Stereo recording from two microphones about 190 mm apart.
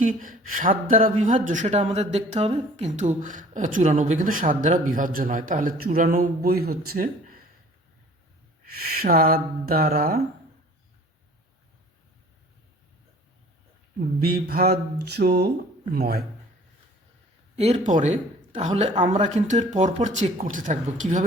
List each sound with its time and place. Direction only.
0.0 s speech: 45° right (ahead or behind)
8.6 s speech: 55° right (ahead or behind)
14.2 s a sound: 55° right (ahead or behind)
17.6 s speech: 35° right (ahead or behind)